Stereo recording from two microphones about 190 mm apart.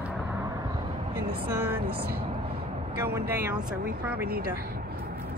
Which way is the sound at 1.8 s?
55° right (ahead or behind).